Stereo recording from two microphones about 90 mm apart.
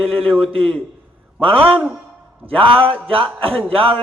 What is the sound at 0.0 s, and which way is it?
A man's voice, 90° right.